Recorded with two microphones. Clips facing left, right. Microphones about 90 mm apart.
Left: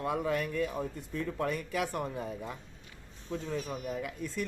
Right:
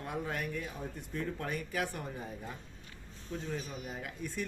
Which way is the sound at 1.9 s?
90° left.